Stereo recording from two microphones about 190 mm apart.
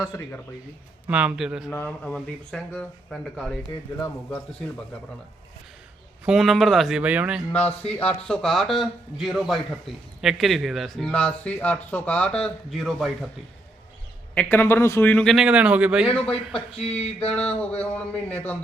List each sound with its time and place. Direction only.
0.0 s speech: 15° left (ahead or behind)
1.0 s a man's voice: 5° right (ahead or behind)
1.7 s a man's voice: 10° left (ahead or behind)
3.9 s speech: 15° left (ahead or behind)
6.2 s a man's voice: centre (ahead or behind)
7.9 s a man's voice: 5° left (ahead or behind)
14.3 s a man's voice: 10° left (ahead or behind)